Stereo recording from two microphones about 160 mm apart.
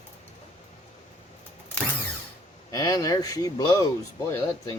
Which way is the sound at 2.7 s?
25° left (ahead or behind).